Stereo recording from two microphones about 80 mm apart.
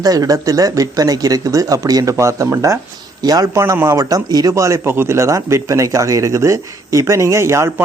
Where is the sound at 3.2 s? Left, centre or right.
Right.